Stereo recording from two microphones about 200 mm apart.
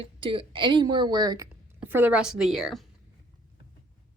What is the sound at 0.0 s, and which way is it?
Speech, 25° right (ahead or behind).